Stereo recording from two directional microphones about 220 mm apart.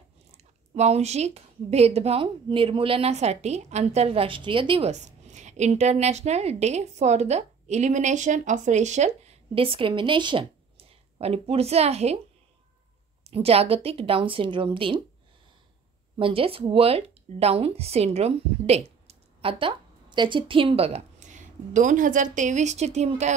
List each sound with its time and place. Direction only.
0.3 s speech: 30° right (ahead or behind)
13.2 s speech: 25° right (ahead or behind)
16.2 s a woman's voice: 25° right (ahead or behind)